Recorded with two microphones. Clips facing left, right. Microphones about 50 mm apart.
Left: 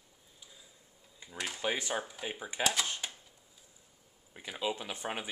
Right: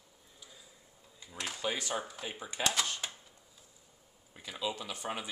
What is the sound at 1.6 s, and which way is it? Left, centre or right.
Speech, left.